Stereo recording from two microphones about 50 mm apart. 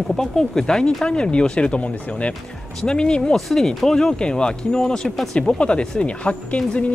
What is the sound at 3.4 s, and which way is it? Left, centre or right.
Speech, centre.